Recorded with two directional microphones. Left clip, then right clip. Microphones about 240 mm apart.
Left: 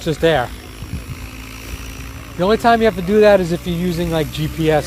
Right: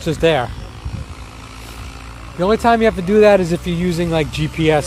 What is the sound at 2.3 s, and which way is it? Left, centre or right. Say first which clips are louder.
Speech: even; centre.